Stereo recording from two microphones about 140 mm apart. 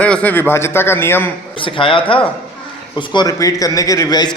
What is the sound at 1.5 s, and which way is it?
A man's voice, 40° left (ahead or behind).